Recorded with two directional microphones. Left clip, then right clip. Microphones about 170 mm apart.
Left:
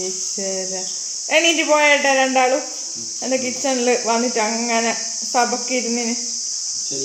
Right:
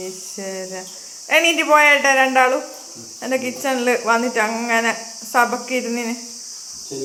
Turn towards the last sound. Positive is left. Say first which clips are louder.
# left 1 dB
turn(degrees=15)  # may be behind; listen again after turning